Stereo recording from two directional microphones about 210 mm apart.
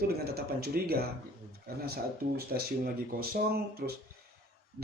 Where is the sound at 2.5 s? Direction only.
45° right (ahead or behind).